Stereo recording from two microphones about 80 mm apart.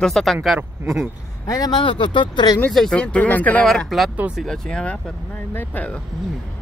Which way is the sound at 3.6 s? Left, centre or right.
Centre.